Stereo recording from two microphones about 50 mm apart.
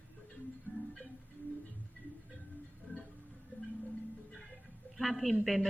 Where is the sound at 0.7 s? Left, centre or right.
Left.